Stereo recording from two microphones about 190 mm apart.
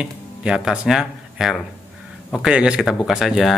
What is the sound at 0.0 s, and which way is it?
Speech, 5° right (ahead or behind).